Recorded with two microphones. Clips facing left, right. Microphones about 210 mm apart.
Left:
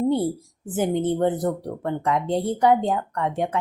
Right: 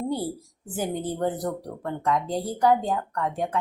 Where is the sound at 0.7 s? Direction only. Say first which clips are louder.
Left 6 dB; 20° left (ahead or behind).